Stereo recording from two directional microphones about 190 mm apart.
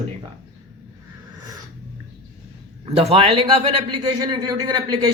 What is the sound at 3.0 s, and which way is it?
Speech, 30° right (ahead or behind).